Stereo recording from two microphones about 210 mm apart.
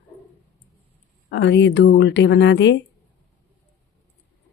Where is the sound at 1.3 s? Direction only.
55° left (ahead or behind).